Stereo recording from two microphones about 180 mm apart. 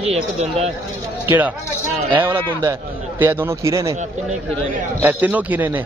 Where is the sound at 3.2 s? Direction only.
10° right (ahead or behind).